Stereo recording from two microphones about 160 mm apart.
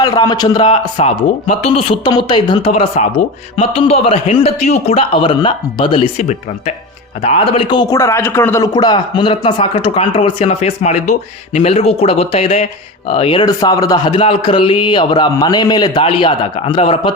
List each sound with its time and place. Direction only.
0.0 s a man's voice: 25° left (ahead or behind)
13.4 s a man's voice: 25° left (ahead or behind)